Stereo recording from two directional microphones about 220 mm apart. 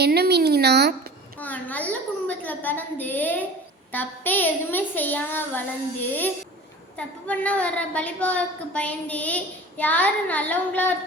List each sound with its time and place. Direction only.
0.0 s speech: 45° right (ahead or behind)
1.4 s a woman's voice: 10° left (ahead or behind)